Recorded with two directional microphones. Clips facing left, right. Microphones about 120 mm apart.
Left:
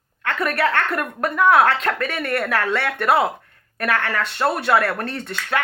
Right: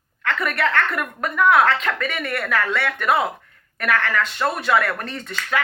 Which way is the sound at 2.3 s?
25° left (ahead or behind).